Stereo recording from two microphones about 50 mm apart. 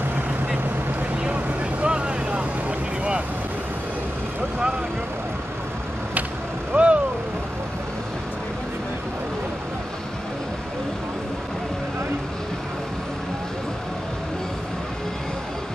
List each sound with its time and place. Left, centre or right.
1.3 s vehicle: right
6.7 s vehicle: right